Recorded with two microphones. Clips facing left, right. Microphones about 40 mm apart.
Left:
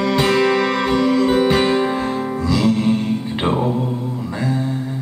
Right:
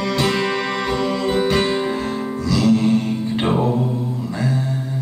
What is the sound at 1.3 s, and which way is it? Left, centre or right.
Music, centre.